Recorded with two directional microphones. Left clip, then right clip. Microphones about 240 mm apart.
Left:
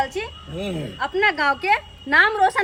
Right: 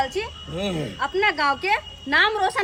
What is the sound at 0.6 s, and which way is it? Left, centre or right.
Speech, centre.